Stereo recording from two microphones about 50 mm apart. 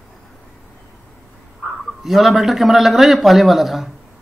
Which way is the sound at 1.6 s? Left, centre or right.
Centre.